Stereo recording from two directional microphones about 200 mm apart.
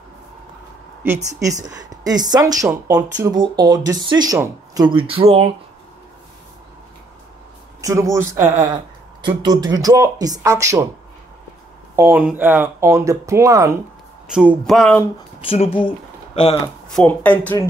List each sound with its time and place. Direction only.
1.0 s speech: 15° right (ahead or behind); by 5.5 s 30° right (ahead or behind)
7.8 s speech: 15° right (ahead or behind)
11.9 s speech: 10° right (ahead or behind)
14.3 s speech: 5° right (ahead or behind)
15.4 s speech: 30° left (ahead or behind)
16.6 s speech: 10° left (ahead or behind)